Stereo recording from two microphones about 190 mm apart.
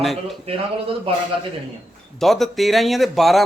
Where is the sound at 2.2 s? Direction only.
Centre (ahead or behind).